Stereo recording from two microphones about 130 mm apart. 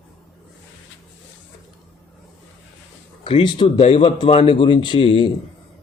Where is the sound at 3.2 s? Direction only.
40° left (ahead or behind).